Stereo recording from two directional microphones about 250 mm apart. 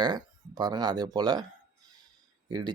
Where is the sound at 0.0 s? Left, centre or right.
Centre.